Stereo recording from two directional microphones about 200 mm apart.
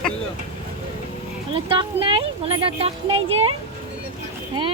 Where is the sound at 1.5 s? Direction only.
25° right (ahead or behind).